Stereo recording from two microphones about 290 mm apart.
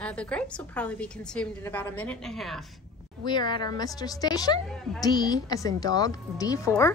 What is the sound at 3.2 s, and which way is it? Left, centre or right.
A woman's voice, centre.